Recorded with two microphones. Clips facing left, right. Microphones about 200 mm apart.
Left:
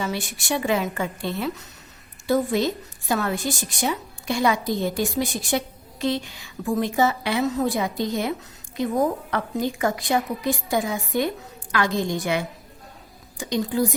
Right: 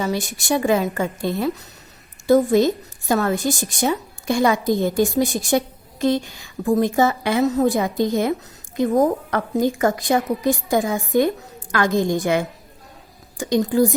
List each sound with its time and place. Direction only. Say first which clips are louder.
0.0 s a woman's voice: right 5 dB; 40° right (ahead or behind)